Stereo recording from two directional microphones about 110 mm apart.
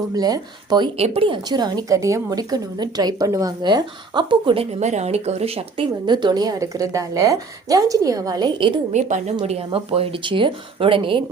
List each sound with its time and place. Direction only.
0.1 s a woman's voice: 35° right (ahead or behind)
0.9 s speech: 65° right (ahead or behind)
1.5 s a woman's voice: 40° right (ahead or behind); by 5.8 s 60° right (ahead or behind)
6.1 s a woman's voice: 40° right (ahead or behind)
8.9 s a woman's voice: 90° right
9.4 s speech: 70° right (ahead or behind)